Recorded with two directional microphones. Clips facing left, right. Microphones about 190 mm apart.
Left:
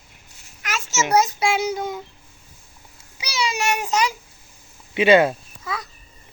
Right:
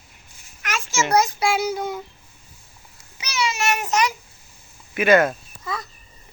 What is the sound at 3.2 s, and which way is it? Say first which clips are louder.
Child singing: even; 10° left (ahead or behind).